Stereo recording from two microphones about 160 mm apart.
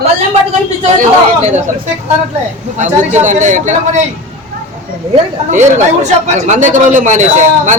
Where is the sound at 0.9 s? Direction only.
45° right (ahead or behind).